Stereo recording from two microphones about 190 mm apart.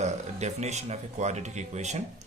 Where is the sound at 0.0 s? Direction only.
35° right (ahead or behind).